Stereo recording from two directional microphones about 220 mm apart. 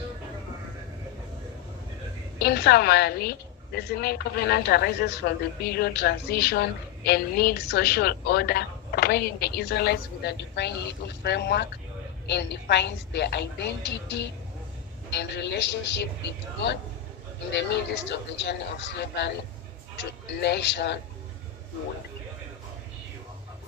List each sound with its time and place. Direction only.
2.4 s a woman's voice: 45° left (ahead or behind)
17.5 s a woman's voice: 50° left (ahead or behind)